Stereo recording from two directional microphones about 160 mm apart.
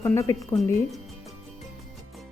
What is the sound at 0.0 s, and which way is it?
Speech, 20° left (ahead or behind).